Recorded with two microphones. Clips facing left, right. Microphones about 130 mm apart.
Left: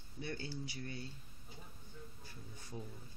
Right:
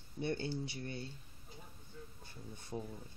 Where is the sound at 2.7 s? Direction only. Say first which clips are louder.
Right 5 dB; 35° right (ahead or behind).